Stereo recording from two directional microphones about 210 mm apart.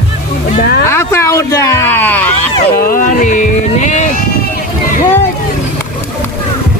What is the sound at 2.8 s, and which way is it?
Speech, 40° left (ahead or behind).